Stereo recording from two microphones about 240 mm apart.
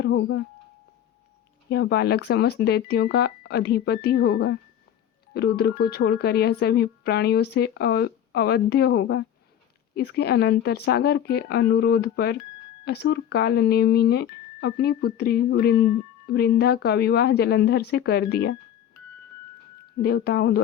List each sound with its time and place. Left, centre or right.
0.0 s speech: left
1.7 s speech: left
20.0 s speech: left